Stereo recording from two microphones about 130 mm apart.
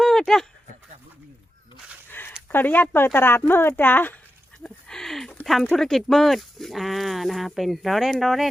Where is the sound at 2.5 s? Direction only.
15° left (ahead or behind).